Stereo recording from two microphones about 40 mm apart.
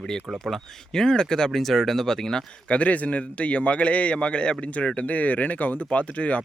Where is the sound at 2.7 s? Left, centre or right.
Left.